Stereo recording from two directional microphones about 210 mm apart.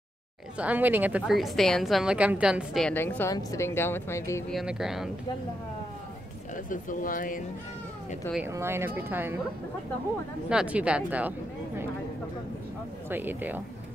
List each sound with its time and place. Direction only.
0.6 s a woman's voice: 5° right (ahead or behind); by 4.5 s 10° left (ahead or behind)
4.5 s a woman's voice: centre (ahead or behind)
6.5 s speech: 40° left (ahead or behind)
8.5 s speech: 10° right (ahead or behind)
10.5 s a woman's voice: 5° right (ahead or behind)
13.1 s speech: 10° right (ahead or behind)